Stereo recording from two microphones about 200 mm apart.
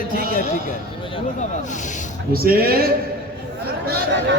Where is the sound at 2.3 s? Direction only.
50° right (ahead or behind).